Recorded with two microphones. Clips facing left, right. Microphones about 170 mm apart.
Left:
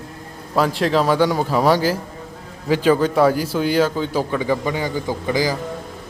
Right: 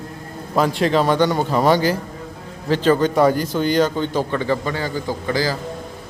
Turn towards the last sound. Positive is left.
turn(degrees=15)  # may be behind; listen again after turning